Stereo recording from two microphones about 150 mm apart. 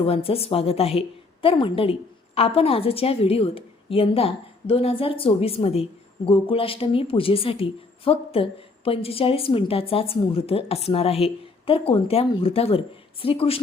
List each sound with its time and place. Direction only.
0.0 s a woman's voice: 40° left (ahead or behind)